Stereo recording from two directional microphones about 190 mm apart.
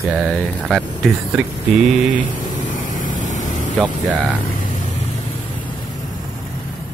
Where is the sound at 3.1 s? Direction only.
40° left (ahead or behind).